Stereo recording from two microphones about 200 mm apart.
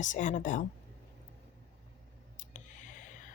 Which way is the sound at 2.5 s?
40° left (ahead or behind).